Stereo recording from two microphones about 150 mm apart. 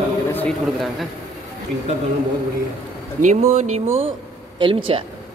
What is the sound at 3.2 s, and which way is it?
Speech, 55° right (ahead or behind).